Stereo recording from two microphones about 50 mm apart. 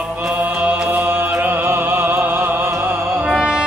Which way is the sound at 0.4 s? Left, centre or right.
Right.